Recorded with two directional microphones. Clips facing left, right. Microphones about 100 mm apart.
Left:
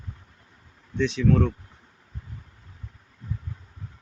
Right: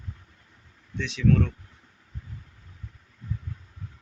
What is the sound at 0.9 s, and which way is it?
Speech, 35° left (ahead or behind).